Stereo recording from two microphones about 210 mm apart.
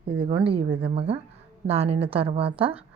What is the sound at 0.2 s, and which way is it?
A woman's voice, 25° right (ahead or behind).